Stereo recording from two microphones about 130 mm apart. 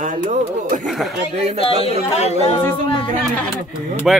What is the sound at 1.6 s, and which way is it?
Speech, 50° left (ahead or behind).